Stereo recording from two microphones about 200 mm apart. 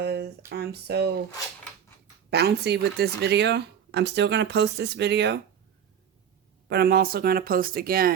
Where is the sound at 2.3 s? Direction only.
55° right (ahead or behind).